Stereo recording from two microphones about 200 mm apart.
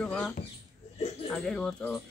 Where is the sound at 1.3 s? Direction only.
5° left (ahead or behind).